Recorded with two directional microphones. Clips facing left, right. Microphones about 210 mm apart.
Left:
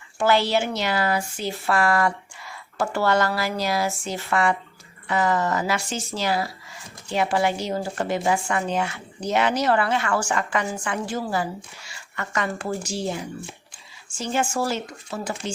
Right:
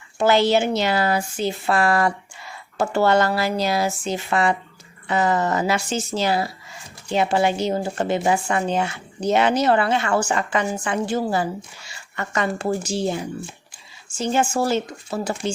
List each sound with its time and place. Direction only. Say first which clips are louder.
0.2 s speech: right 3 dB; 20° right (ahead or behind)
1.5 s speech: right 2 dB; 15° right (ahead or behind)
11.9 s a sound: right 2 dB; 25° right (ahead or behind)
12.9 s speech: right 4 dB; 25° right (ahead or behind)